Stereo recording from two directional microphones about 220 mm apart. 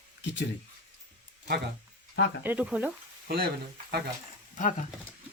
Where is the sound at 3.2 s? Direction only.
45° right (ahead or behind).